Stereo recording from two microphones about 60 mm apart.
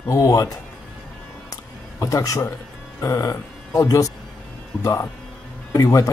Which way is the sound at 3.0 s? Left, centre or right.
Left.